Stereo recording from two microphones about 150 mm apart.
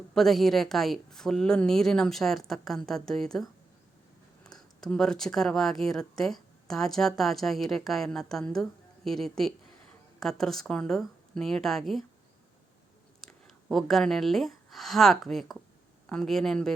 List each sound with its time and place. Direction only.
0.1 s speech: centre (ahead or behind)
13.2 s speech: centre (ahead or behind)